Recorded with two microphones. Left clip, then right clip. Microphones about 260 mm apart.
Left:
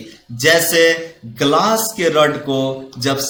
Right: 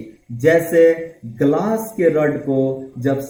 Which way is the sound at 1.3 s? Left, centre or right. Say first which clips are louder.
Left 4 dB; left.